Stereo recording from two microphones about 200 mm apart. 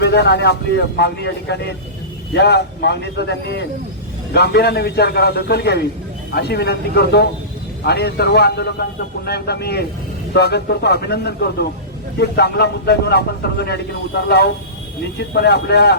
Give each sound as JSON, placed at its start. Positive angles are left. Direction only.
{"t": 0.0, "sound": "a man's voice", "side_deg": 55}